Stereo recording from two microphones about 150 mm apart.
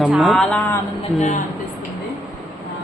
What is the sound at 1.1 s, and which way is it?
Speech, 55° left (ahead or behind).